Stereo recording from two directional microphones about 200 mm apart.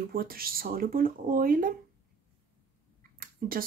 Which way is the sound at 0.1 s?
45° right (ahead or behind).